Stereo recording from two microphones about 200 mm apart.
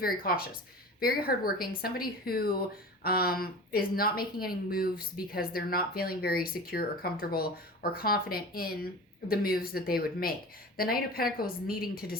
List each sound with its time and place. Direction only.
0.0 s speech: 50° left (ahead or behind)